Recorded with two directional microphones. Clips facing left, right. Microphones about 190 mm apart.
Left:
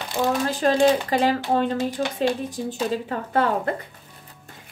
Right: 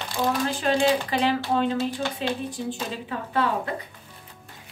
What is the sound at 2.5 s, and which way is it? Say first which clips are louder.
Speech: left 5 dB; 45° left (ahead or behind).